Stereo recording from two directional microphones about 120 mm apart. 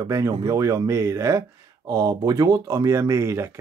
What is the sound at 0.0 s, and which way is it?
Speech, 25° right (ahead or behind).